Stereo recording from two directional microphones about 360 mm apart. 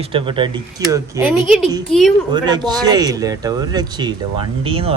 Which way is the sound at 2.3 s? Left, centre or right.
Centre.